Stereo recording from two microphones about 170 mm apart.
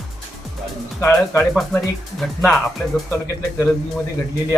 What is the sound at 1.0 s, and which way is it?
Speech, 15° left (ahead or behind).